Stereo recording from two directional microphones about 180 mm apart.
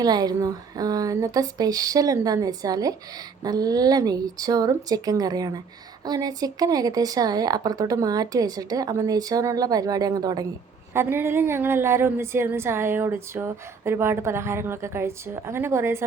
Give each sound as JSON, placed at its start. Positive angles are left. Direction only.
{"t": 0.0, "sound": "a woman's voice", "side_deg": -20}